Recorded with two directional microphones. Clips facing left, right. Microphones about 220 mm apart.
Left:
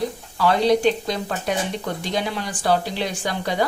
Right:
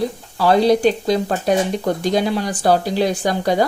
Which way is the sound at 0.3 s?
35° right (ahead or behind).